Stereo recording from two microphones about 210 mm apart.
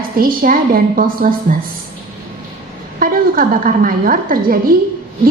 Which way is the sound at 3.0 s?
45° right (ahead or behind).